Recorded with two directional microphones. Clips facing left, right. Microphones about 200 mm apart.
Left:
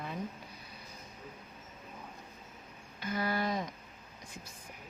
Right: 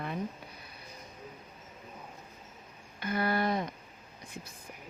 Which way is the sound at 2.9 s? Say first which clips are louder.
Right 3 dB; 60° right (ahead or behind).